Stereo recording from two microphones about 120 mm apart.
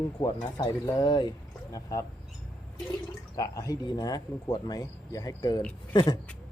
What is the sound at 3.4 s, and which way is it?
Speech, 30° left (ahead or behind).